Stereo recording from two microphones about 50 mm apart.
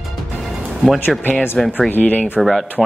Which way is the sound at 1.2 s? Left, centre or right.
Left.